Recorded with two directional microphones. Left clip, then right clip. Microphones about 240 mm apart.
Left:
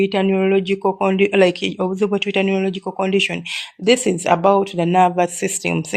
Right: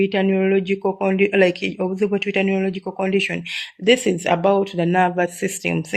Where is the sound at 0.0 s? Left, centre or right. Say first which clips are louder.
Left 2 dB; left.